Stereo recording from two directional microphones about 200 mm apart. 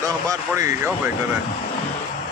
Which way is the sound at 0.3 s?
15° right (ahead or behind).